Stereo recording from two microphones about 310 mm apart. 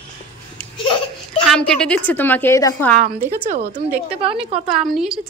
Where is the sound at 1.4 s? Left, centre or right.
Centre.